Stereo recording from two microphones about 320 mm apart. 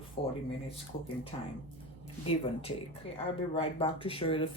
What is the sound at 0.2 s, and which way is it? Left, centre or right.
Speech, centre.